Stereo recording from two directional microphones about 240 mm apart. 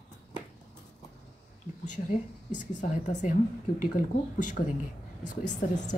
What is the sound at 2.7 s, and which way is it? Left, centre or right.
A woman's voice, left.